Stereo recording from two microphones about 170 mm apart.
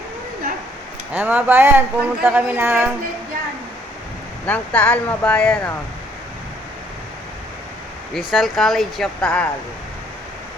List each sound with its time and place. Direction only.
1.1 s speech: 10° right (ahead or behind)
4.4 s speech: 10° left (ahead or behind)
8.1 s speech: centre (ahead or behind)